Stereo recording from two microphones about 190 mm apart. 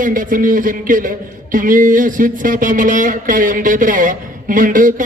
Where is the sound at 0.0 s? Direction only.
45° right (ahead or behind).